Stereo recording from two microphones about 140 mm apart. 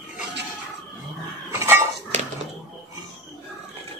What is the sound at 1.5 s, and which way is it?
Dishes, 20° right (ahead or behind).